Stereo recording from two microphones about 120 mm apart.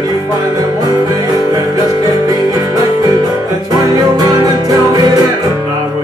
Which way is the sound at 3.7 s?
35° right (ahead or behind).